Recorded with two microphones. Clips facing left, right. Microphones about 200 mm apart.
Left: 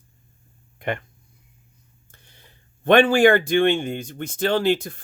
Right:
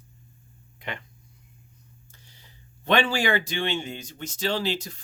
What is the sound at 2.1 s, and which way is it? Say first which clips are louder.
Speech: left 5 dB; 55° left (ahead or behind).